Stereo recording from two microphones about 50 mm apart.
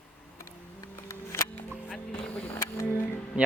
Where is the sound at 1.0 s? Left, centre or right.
Left.